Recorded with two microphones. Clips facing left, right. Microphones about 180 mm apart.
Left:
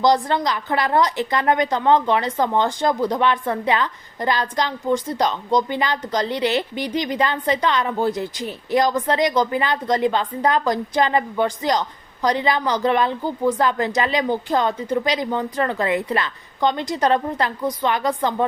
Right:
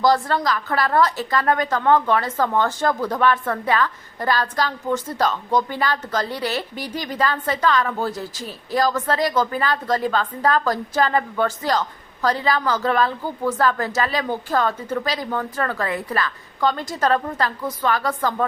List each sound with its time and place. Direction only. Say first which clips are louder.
0.0 s a woman's voice: left 1 dB; 20° left (ahead or behind)